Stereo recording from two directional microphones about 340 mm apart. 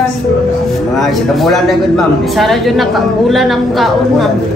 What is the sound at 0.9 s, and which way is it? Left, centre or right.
A woman's voice, centre.